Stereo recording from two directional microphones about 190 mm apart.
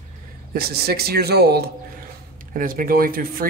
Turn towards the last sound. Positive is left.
turn(degrees=-50)  # may be behind; listen again after turning